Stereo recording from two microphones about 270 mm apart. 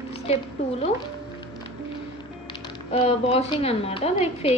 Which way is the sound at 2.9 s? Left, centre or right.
Left.